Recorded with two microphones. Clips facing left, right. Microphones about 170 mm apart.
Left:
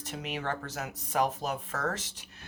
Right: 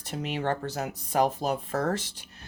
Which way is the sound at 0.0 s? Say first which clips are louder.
Right 5 dB; 30° right (ahead or behind).